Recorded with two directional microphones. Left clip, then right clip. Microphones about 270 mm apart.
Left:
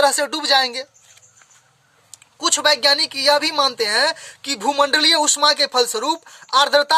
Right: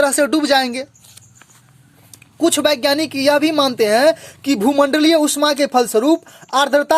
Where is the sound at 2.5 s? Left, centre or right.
Centre.